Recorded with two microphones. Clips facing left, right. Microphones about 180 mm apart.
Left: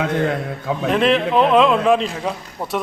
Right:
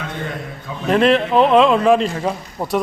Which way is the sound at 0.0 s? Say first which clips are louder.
Left 7 dB; 75° left (ahead or behind).